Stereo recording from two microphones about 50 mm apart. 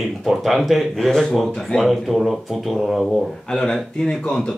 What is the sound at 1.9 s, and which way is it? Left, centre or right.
Speech, centre.